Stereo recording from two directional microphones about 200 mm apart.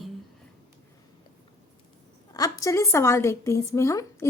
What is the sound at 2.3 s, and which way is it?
A woman's voice, 15° left (ahead or behind).